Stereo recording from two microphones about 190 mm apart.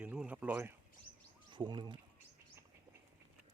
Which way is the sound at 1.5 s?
25° right (ahead or behind).